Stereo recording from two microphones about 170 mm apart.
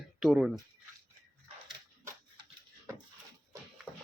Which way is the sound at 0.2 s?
5° right (ahead or behind).